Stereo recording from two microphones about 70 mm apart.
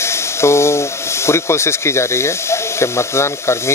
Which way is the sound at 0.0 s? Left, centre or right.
Left.